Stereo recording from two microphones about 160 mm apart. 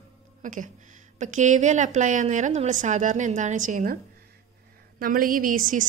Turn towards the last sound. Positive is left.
turn(degrees=-55)  # may be behind; listen again after turning